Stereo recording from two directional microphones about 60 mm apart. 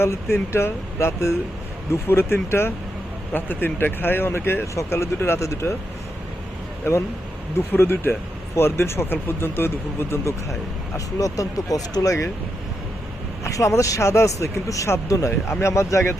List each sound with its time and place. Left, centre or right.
0.0 s speech: left
1.9 s speech: left
4.6 s speech: left
6.8 s speech: left
7.7 s speech: left
10.9 s speech: left
13.4 s speech: left